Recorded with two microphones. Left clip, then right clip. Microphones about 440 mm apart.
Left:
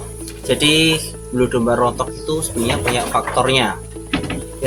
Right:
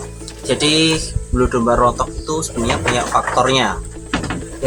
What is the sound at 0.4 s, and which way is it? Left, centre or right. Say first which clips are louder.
Speech: left 1 dB; left.